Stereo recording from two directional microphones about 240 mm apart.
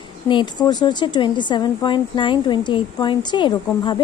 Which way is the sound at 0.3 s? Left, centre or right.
Centre.